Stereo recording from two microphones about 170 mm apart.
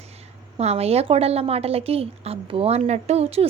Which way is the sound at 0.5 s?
40° right (ahead or behind).